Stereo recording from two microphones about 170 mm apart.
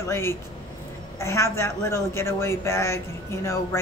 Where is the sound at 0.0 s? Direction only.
15° left (ahead or behind).